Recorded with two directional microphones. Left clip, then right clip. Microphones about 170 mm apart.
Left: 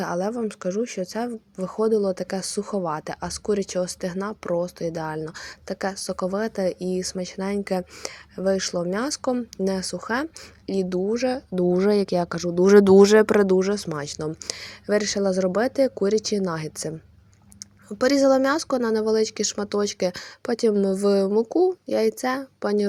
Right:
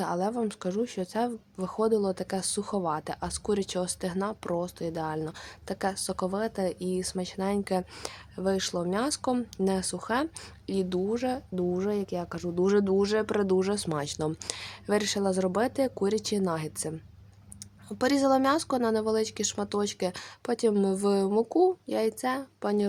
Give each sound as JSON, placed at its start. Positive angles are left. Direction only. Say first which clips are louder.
{"t": 0.0, "sound": "speech", "louder": "left 3 dB", "side_deg": 15}
{"t": 12.7, "sound": "speech", "louder": "left 14 dB", "side_deg": 45}
{"t": 13.6, "sound": "speech", "louder": "left 5 dB", "side_deg": 15}